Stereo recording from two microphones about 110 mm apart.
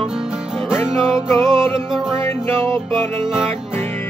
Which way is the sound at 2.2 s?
20° left (ahead or behind).